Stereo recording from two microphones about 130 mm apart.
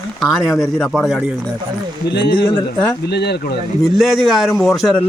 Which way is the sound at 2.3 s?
35° left (ahead or behind).